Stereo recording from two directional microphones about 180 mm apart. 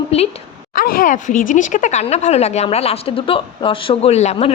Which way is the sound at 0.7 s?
50° left (ahead or behind).